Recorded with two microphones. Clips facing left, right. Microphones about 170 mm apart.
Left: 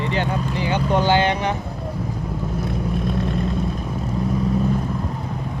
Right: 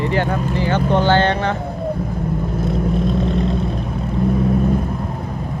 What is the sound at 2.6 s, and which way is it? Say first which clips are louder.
Vehicle: right 6 dB; 60° left (ahead or behind).